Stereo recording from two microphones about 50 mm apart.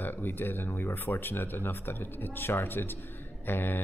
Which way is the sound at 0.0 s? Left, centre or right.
Left.